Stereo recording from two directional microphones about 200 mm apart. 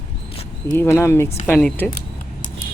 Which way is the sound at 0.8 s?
10° left (ahead or behind).